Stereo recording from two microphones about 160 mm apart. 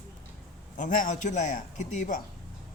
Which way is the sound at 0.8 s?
55° left (ahead or behind).